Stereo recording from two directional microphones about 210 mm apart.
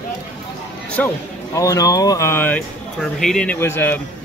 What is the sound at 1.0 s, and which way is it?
Speech, 5° left (ahead or behind).